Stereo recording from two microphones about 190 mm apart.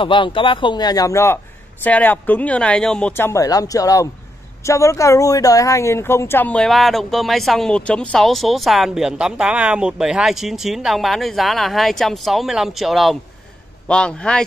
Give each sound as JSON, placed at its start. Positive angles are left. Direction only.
{"t": 0.0, "sound": "a man's voice", "side_deg": 25}